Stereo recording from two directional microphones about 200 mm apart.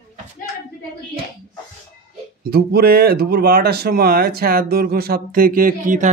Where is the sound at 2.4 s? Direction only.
50° right (ahead or behind).